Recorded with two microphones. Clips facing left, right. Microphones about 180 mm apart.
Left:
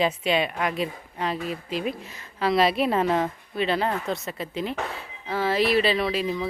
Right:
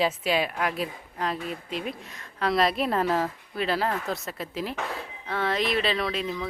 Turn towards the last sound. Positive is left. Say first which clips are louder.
# left 4 dB
turn(degrees=5)  # may be behind; listen again after turning